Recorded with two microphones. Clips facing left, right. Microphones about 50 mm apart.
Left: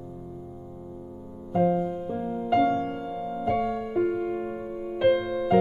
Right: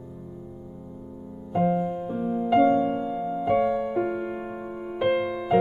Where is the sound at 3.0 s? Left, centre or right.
Right.